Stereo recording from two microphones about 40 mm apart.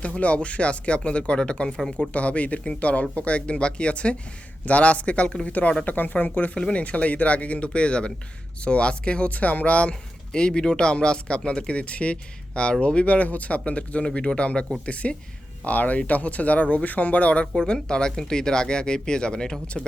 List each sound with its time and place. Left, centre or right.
0.2 s speech: left
1.9 s speech: left
5.5 s speech: left
6.5 s speech: left
6.7 s speech: left
9.3 s speech: left
10.3 s speech: left
13.1 s speech: left
15.6 s speech: left
17.4 s speech: centre